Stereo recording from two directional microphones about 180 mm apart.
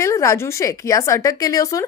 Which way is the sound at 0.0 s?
15° left (ahead or behind).